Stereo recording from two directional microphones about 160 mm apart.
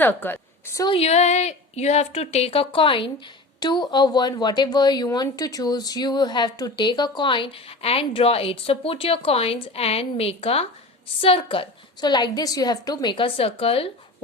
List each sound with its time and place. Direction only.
0.0 s a woman's voice: 10° left (ahead or behind)
0.9 s a woman's voice: 40° left (ahead or behind)